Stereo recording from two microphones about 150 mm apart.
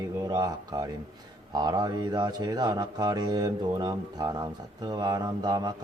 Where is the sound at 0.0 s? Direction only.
25° right (ahead or behind).